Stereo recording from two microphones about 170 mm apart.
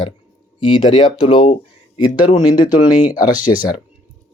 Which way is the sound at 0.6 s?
30° left (ahead or behind).